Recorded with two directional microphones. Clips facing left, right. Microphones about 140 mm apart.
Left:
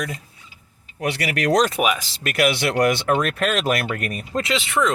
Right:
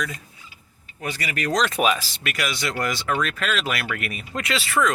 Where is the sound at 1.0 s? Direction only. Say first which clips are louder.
Left 5 dB; 70° left (ahead or behind).